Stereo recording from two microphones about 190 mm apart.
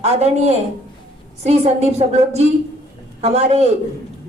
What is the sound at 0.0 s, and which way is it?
Speech, 35° right (ahead or behind).